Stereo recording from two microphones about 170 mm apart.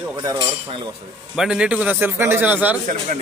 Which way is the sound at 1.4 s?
5° right (ahead or behind).